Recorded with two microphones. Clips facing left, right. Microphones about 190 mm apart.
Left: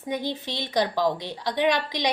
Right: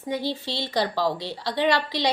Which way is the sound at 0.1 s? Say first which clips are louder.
Right 1 dB; 15° left (ahead or behind).